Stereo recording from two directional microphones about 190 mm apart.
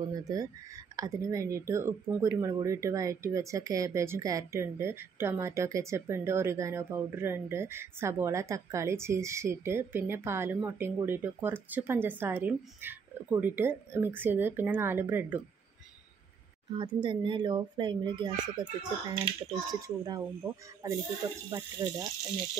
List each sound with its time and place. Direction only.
0.0 s speech: 20° right (ahead or behind)
16.7 s speech: 25° right (ahead or behind)